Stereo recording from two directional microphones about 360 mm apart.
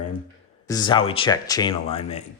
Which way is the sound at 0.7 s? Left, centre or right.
Centre.